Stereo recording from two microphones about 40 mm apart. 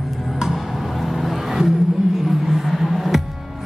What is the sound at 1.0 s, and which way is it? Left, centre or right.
Vehicle, centre.